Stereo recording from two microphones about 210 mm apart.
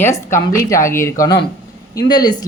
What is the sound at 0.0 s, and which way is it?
Speech, 15° left (ahead or behind).